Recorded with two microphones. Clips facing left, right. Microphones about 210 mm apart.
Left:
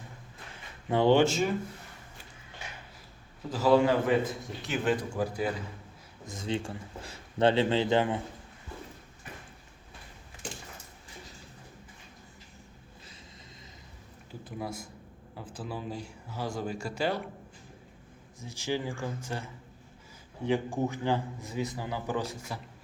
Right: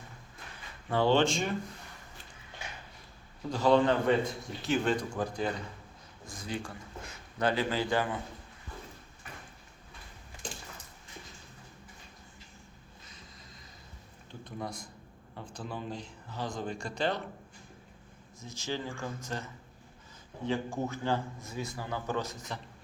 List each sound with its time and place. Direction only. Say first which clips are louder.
0.9 s a man's voice: left 3 dB; 20° left (ahead or behind)
3.5 s a man's voice: left 2 dB; 5° left (ahead or behind)
6.2 s speech: left 5 dB; 25° left (ahead or behind)
14.3 s a sound: left 2 dB; 5° left (ahead or behind)
15.4 s a man's voice: left 1 dB; 5° left (ahead or behind)
18.4 s a man's voice: left 4 dB; 15° left (ahead or behind)